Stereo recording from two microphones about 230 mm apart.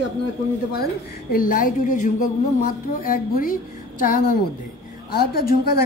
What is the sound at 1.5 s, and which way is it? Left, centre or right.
A woman's voice, left.